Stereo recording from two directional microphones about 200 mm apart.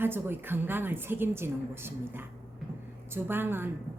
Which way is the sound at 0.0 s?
10° right (ahead or behind).